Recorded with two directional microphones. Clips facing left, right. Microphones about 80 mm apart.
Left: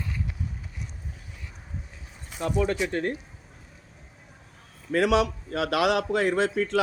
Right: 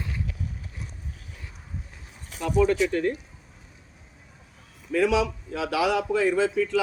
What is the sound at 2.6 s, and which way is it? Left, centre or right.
Speech, left.